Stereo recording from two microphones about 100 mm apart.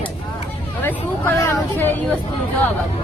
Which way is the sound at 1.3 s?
30° left (ahead or behind).